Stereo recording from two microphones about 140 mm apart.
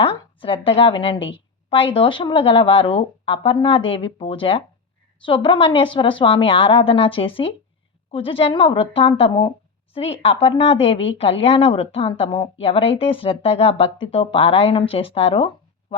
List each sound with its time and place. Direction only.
0.0 s speech: 40° left (ahead or behind)